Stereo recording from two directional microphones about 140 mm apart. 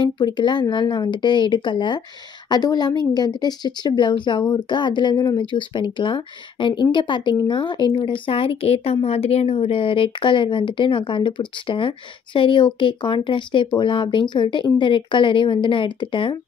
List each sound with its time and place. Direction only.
0.0 s speech: 35° left (ahead or behind)